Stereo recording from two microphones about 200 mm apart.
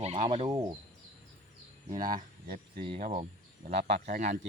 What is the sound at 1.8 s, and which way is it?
Speech, 40° right (ahead or behind).